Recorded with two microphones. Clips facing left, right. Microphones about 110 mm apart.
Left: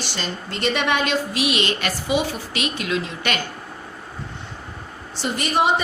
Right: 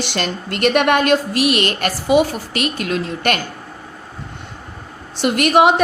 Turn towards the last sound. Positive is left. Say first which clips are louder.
# right 8 dB
turn(degrees=-75)  # may be behind; listen again after turning